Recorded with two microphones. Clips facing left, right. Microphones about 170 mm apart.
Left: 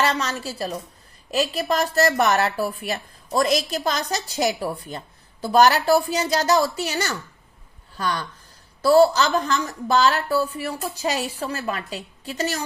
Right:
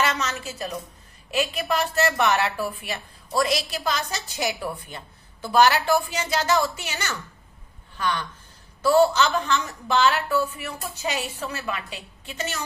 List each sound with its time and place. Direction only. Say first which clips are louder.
0.0 s a woman's voice: left 3 dB; 35° left (ahead or behind)